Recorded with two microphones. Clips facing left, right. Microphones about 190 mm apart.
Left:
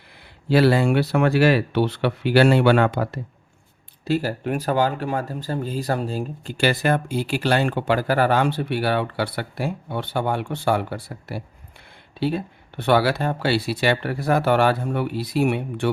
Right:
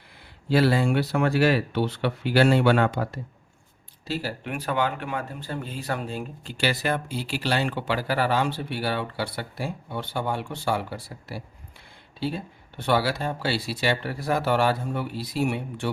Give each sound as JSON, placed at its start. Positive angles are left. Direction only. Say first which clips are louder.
{"t": 0.5, "sound": "speech", "louder": "left 4 dB", "side_deg": 70}
{"t": 4.0, "sound": "speech", "louder": "left 8 dB", "side_deg": 50}
{"t": 12.2, "sound": "speech", "louder": "left 6 dB", "side_deg": 65}